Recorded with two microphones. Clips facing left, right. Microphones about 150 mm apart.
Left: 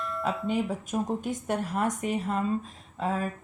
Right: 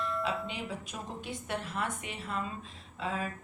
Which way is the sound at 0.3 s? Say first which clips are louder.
Left 7 dB; 45° left (ahead or behind).